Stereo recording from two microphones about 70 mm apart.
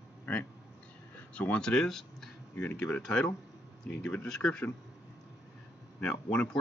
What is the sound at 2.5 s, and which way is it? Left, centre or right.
Speech, centre.